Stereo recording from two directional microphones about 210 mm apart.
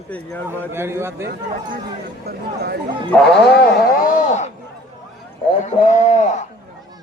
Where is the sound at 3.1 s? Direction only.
Centre (ahead or behind).